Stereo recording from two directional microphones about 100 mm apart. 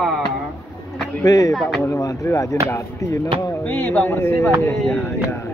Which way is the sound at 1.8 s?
35° left (ahead or behind).